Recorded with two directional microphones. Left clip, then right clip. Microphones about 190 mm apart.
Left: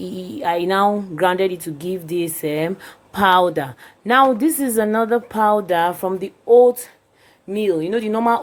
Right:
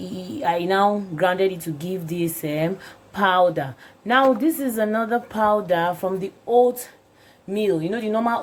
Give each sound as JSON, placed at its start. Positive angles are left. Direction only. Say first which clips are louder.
{"t": 0.0, "sound": "speech", "louder": "left 1 dB", "side_deg": 25}
{"t": 7.5, "sound": "speech", "louder": "left 3 dB", "side_deg": 35}